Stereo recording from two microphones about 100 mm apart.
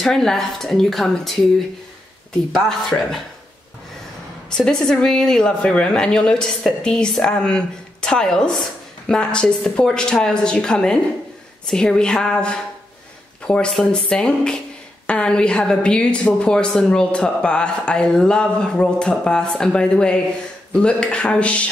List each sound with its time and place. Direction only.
0.0 s speech: 5° left (ahead or behind)
2.5 s speech: 5° left (ahead or behind)
4.5 s a woman's voice: 5° left (ahead or behind)
13.5 s a woman's voice: 5° left (ahead or behind)